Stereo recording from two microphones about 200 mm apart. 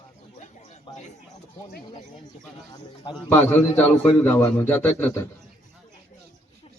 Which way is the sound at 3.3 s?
10° left (ahead or behind).